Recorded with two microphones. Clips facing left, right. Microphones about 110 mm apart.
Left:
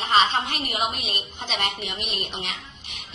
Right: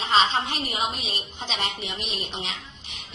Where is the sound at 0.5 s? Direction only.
50° left (ahead or behind).